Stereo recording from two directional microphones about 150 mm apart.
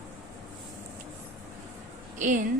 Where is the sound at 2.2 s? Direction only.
55° right (ahead or behind).